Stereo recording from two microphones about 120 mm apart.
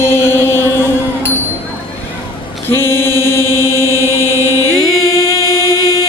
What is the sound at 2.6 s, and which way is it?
Mantra, 20° left (ahead or behind).